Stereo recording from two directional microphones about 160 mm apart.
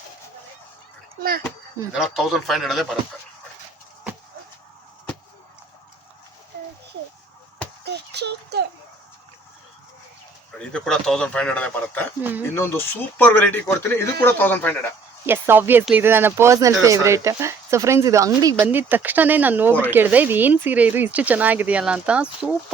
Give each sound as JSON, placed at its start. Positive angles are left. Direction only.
{"t": 1.9, "sound": "a man's voice", "side_deg": 0}
{"t": 8.1, "sound": "a sound", "side_deg": -90}
{"t": 10.6, "sound": "a man's voice", "side_deg": 5}
{"t": 15.3, "sound": "speech", "side_deg": -15}